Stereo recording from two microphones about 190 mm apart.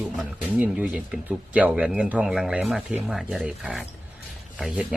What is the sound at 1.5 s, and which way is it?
Speech, 5° right (ahead or behind).